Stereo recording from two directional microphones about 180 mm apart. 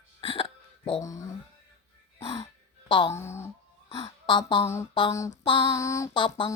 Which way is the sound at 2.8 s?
25° left (ahead or behind).